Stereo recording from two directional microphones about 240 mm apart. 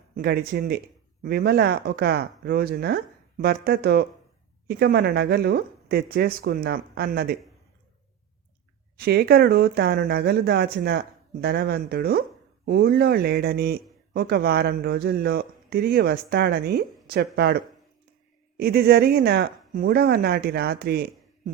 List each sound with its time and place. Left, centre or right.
0.2 s speech: right
9.0 s speech: right